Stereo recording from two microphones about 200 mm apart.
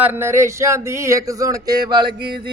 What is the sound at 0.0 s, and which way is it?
Speech, 10° right (ahead or behind).